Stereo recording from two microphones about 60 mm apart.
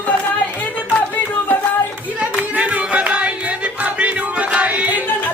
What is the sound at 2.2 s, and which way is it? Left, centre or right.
Music, right.